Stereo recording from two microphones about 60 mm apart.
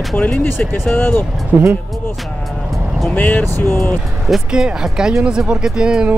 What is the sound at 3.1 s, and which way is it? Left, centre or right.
Speech, left.